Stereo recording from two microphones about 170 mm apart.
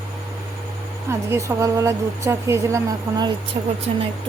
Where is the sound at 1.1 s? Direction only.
15° right (ahead or behind).